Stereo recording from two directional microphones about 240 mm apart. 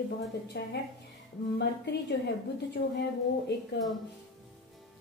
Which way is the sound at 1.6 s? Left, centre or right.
Left.